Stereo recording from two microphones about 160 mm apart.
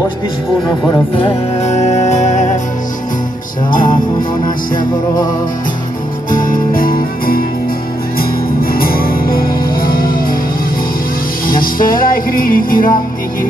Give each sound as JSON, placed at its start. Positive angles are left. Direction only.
{"t": 1.1, "sound": "music", "side_deg": 40}
{"t": 6.3, "sound": "music", "side_deg": 60}
{"t": 8.7, "sound": "music", "side_deg": 65}
{"t": 11.4, "sound": "music", "side_deg": 65}